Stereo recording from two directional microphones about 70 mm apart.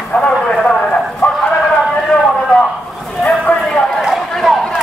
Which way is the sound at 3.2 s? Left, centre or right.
Centre.